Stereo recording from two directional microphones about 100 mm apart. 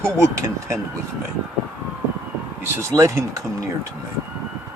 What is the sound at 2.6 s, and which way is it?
Speech, 30° right (ahead or behind).